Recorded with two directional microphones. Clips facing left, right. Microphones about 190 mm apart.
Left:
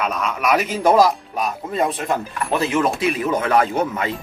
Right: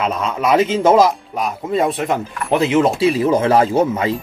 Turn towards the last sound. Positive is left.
turn(degrees=-30)  # may be behind; listen again after turning